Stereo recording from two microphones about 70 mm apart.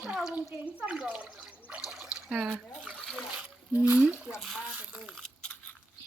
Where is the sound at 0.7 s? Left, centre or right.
Centre.